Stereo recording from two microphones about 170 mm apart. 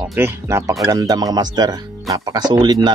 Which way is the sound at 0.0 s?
15° right (ahead or behind).